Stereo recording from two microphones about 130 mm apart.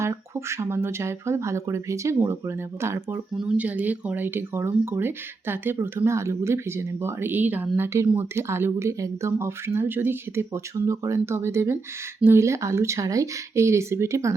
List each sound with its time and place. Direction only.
0.0 s speech: 20° right (ahead or behind)